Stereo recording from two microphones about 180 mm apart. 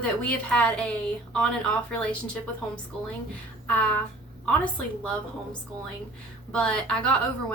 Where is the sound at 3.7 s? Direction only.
5° left (ahead or behind).